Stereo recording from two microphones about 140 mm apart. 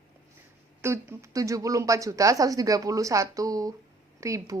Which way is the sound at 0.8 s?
20° right (ahead or behind).